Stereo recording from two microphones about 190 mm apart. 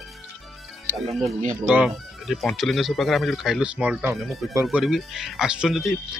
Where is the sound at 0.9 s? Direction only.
Centre (ahead or behind).